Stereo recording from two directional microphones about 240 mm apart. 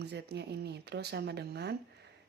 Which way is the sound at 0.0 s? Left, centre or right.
Right.